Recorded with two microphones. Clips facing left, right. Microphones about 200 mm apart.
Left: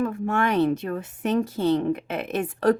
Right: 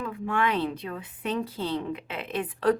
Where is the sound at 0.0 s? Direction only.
45° left (ahead or behind).